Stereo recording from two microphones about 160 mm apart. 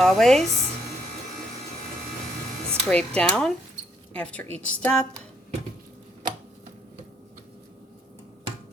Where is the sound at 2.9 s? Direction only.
5° left (ahead or behind).